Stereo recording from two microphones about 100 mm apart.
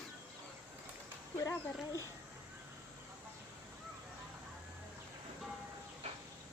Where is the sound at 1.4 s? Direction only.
35° left (ahead or behind).